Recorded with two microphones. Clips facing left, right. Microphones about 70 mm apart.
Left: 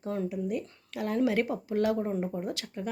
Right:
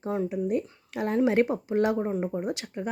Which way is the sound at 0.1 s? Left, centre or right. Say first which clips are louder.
Right 4 dB; right.